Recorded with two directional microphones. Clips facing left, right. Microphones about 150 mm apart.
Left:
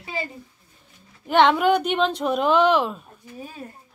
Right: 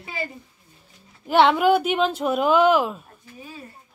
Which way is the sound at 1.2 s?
5° right (ahead or behind).